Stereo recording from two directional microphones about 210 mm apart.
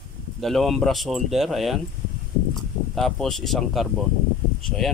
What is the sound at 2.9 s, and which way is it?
Speech, centre (ahead or behind).